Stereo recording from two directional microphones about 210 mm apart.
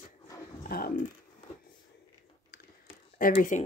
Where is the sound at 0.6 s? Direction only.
45° left (ahead or behind).